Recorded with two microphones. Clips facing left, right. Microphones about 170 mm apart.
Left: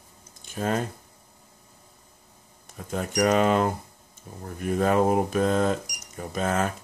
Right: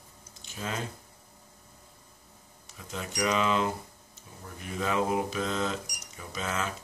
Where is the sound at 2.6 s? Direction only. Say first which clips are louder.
Left 8 dB; 50° left (ahead or behind).